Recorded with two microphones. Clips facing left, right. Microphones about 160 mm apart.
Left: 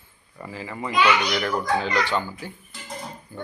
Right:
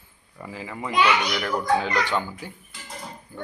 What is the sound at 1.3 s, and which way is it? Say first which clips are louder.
Speech: left 2 dB; 5° left (ahead or behind).